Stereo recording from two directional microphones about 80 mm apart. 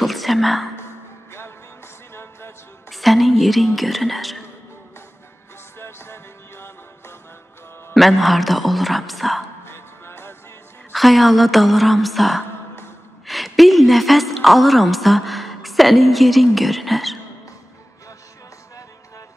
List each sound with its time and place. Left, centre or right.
0.0 s whispering: centre
2.9 s a woman's voice: centre
5.8 s music: left
7.9 s a woman's voice: centre
9.7 s music: left
10.9 s a woman's voice: centre